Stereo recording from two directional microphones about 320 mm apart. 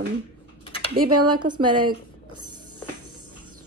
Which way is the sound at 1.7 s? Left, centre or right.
Centre.